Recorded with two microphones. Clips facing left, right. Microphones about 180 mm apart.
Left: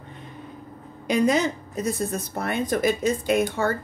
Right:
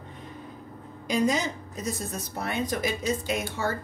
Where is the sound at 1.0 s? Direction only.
60° left (ahead or behind).